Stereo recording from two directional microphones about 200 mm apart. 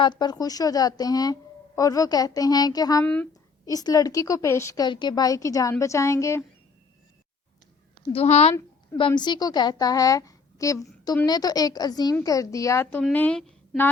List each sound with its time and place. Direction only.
0.0 s a woman's voice: 20° left (ahead or behind)
8.1 s a woman's voice: 30° left (ahead or behind)
8.5 s a sound: 15° left (ahead or behind)
9.0 s a woman's voice: 20° left (ahead or behind); by 13.9 s 5° left (ahead or behind)